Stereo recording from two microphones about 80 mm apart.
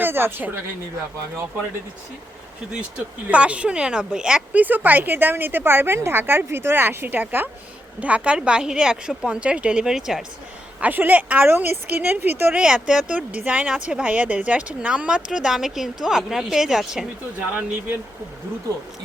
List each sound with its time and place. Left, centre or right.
0.0 s a woman's voice: right
3.2 s speech: centre
4.6 s a woman's voice: right; by 10.2 s centre
10.8 s a woman's voice: right
12.5 s speech: centre
17.5 s a woman's voice: right